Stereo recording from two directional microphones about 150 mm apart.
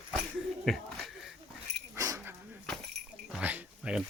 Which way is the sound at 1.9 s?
20° right (ahead or behind).